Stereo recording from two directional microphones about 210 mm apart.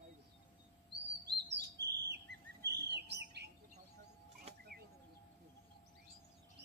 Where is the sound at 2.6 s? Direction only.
55° right (ahead or behind).